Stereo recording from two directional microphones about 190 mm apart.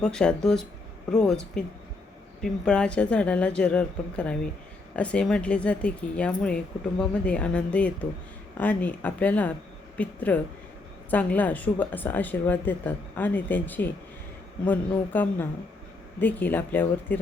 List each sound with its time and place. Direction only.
0.0 s speech: 5° left (ahead or behind)